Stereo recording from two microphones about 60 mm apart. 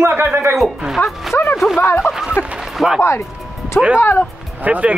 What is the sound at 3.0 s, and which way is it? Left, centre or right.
Speech, left.